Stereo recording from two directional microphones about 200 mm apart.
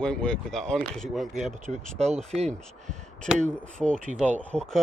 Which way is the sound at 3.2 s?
5° left (ahead or behind).